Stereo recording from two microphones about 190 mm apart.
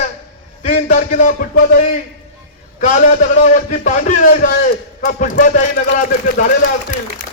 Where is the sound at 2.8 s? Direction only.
40° left (ahead or behind).